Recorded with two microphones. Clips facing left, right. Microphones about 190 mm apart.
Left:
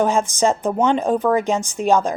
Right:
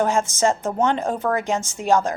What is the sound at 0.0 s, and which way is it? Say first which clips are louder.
A woman's voice: left 2 dB; 15° left (ahead or behind).